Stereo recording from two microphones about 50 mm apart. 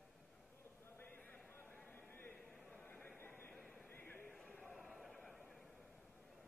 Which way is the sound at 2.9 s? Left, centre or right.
Left.